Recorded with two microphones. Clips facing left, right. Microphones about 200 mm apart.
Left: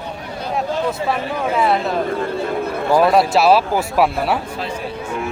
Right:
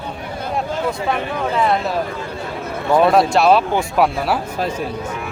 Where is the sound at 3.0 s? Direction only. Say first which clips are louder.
Right 1 dB; centre (ahead or behind).